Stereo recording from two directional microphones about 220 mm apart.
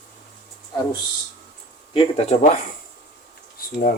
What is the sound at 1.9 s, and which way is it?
Speech, 30° left (ahead or behind).